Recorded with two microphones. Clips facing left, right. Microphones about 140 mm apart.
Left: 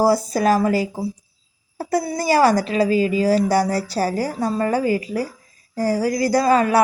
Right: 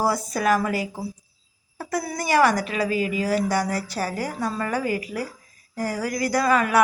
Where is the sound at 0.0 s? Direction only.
35° left (ahead or behind).